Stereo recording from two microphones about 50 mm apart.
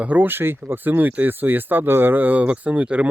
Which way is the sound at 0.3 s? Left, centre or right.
Right.